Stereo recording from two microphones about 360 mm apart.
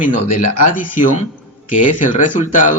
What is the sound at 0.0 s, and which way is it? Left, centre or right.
Speech, left.